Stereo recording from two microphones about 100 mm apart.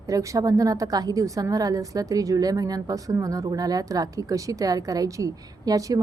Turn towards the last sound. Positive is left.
turn(degrees=-35)  # may be behind; listen again after turning